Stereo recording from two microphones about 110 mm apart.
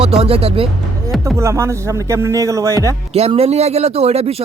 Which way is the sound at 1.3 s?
25° right (ahead or behind).